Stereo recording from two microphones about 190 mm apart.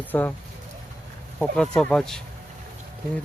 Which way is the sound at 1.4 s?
5° left (ahead or behind).